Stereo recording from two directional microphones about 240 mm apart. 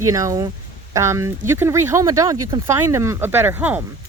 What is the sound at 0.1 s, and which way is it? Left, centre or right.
Speech, centre.